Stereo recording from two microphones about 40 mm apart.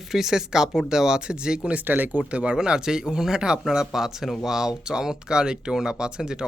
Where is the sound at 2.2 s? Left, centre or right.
Right.